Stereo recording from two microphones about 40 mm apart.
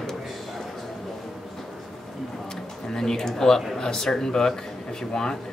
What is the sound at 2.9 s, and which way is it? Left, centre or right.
Speech, centre.